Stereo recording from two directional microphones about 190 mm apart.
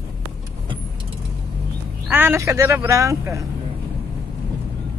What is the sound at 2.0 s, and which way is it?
Speech, 10° right (ahead or behind).